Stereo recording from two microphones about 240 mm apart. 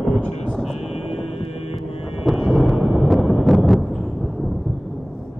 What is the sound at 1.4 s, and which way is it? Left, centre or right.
Hum, left.